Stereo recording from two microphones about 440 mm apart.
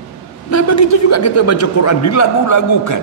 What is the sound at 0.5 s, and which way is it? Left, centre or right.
A man's voice, left.